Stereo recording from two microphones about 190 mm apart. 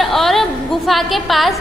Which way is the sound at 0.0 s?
Centre (ahead or behind).